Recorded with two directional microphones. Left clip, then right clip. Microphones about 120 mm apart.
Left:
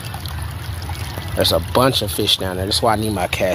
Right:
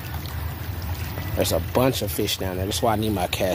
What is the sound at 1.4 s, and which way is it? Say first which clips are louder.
Speech: left 6 dB; 15° left (ahead or behind).